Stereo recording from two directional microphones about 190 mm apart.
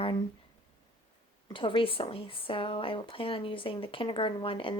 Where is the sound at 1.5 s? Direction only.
25° left (ahead or behind).